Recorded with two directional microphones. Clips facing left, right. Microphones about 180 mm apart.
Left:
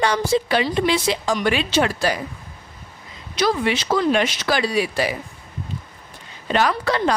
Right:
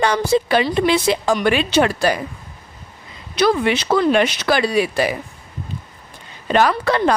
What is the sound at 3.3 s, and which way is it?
Speech, 60° right (ahead or behind).